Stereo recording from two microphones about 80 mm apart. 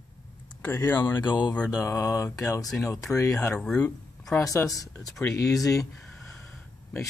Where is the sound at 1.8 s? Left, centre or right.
Left.